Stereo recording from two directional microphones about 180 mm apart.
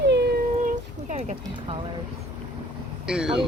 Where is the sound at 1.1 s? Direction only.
40° right (ahead or behind).